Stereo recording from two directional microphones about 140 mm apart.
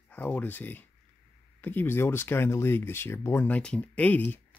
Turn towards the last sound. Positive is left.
turn(degrees=10)  # may be behind; listen again after turning